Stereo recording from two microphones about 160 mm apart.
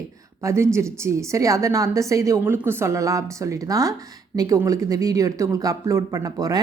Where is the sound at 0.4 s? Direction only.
15° right (ahead or behind).